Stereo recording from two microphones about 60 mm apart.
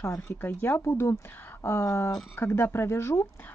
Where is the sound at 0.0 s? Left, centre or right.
Left.